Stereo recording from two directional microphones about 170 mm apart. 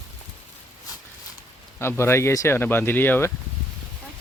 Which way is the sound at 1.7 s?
15° left (ahead or behind).